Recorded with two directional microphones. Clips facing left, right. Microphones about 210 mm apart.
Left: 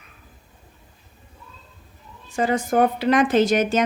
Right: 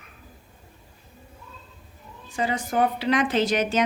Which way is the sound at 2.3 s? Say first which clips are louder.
Left 5 dB; 45° left (ahead or behind).